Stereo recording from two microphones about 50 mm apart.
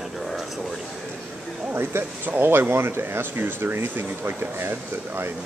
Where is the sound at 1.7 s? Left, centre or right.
Right.